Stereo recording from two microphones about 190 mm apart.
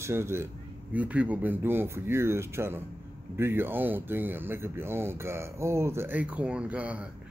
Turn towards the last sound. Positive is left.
turn(degrees=-5)  # may be behind; listen again after turning